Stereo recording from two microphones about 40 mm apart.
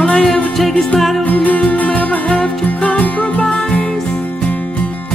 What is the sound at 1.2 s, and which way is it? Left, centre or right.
Music, left.